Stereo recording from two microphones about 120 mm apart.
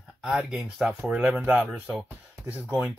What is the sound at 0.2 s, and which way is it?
Speech, 5° right (ahead or behind).